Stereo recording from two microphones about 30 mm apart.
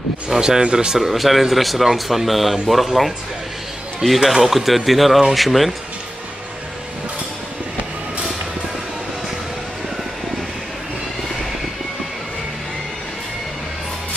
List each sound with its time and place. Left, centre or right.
0.4 s speech: right
1.1 s speech: centre